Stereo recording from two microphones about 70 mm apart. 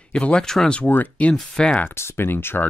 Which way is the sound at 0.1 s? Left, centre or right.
Centre.